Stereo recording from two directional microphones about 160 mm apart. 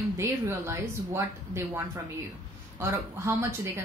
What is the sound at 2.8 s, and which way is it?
Speech, 15° right (ahead or behind).